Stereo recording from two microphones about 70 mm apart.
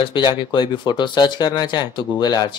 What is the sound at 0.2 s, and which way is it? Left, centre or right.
Speech, left.